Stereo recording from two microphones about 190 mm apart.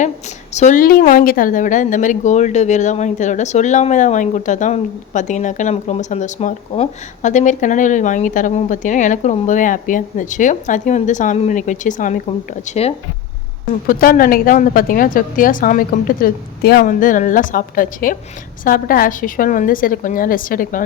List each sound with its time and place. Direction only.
0.5 s speech: 40° left (ahead or behind)
13.8 s a woman's voice: 50° left (ahead or behind)